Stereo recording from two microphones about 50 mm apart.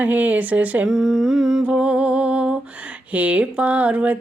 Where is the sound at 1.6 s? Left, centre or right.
Right.